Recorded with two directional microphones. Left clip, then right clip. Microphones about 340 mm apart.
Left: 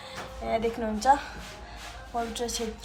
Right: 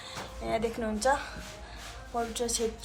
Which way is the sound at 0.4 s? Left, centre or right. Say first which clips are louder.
Left 3 dB; centre.